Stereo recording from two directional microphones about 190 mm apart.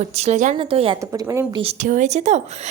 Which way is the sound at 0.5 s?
30° right (ahead or behind).